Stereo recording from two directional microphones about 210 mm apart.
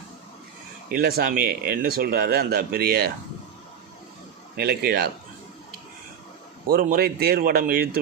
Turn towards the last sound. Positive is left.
turn(degrees=-45)  # may be behind; listen again after turning